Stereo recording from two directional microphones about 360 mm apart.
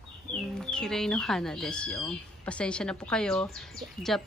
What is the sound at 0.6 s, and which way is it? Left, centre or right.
A woman's voice, centre.